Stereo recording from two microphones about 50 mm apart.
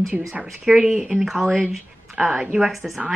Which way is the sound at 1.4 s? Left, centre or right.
Centre.